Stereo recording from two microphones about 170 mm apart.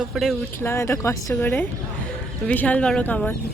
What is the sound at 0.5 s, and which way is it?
A woman's voice, 15° left (ahead or behind).